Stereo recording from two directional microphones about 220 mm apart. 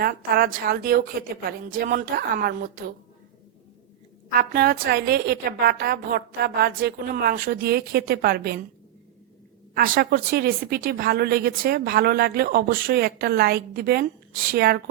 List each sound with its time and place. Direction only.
0.0 s a woman's voice: 40° right (ahead or behind)
4.3 s a woman's voice: 40° right (ahead or behind)
9.7 s a woman's voice: 40° right (ahead or behind)